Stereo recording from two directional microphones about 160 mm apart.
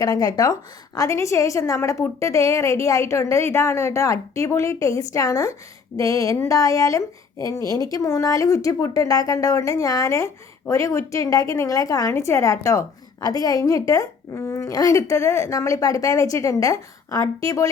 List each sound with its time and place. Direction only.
0.0 s a woman's voice: 20° left (ahead or behind)